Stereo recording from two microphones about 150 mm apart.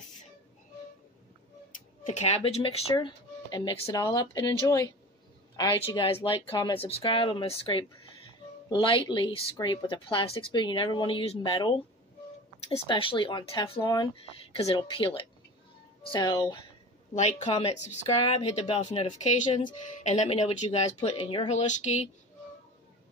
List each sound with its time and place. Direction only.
2.0 s speech: 45° left (ahead or behind); by 16.5 s 25° left (ahead or behind)
17.1 s speech: 50° left (ahead or behind)
19.0 s speech: 50° left (ahead or behind)